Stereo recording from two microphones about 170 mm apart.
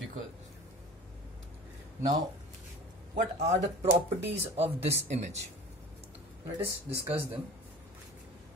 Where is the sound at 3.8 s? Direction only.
35° right (ahead or behind).